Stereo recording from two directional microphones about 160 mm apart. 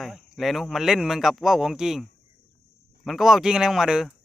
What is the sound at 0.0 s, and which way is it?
Speech, centre (ahead or behind).